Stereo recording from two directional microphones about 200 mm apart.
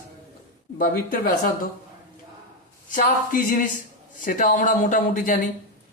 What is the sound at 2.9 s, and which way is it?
A man's voice, 40° left (ahead or behind).